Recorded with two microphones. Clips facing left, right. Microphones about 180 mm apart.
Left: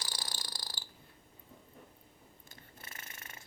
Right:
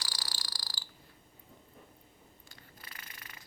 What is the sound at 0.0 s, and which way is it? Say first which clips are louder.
Cricket: left 2 dB; 20° left (ahead or behind).